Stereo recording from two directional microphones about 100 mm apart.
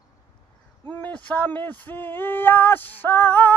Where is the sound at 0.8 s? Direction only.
15° left (ahead or behind).